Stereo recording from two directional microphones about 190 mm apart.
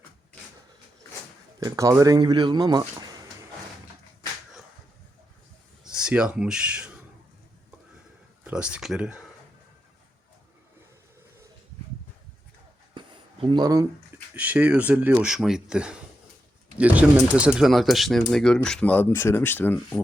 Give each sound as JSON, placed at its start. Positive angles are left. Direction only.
{"t": 1.5, "sound": "speech", "side_deg": -15}
{"t": 5.8, "sound": "speech", "side_deg": -5}
{"t": 8.4, "sound": "speech", "side_deg": -5}
{"t": 12.9, "sound": "a sound", "side_deg": -25}
{"t": 14.3, "sound": "speech", "side_deg": -10}